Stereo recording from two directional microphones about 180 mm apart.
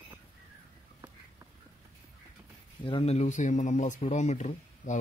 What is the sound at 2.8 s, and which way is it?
Speech, 30° left (ahead or behind).